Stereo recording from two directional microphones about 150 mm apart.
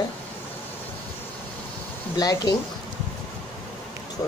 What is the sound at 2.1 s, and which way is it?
Speech, 25° left (ahead or behind).